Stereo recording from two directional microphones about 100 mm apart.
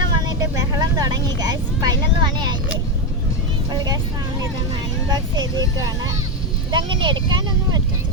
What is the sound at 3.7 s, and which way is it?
Speech, 40° right (ahead or behind).